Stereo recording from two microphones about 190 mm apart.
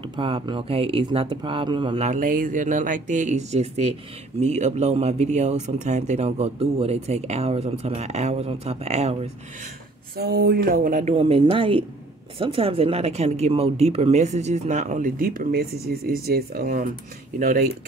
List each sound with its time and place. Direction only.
0.1 s speech: 25° right (ahead or behind)
2.0 s speech: 45° right (ahead or behind)
10.1 s speech: 55° right (ahead or behind)